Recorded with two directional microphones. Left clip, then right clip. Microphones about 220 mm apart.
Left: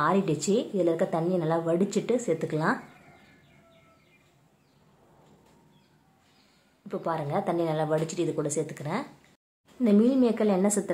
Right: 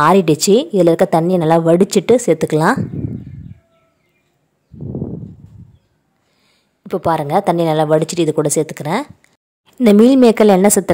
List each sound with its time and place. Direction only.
0.0 s a woman's voice: 45° right (ahead or behind)
6.9 s a woman's voice: 45° right (ahead or behind)